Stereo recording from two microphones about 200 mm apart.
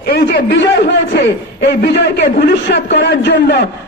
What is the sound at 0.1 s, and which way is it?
A man's voice, 55° left (ahead or behind).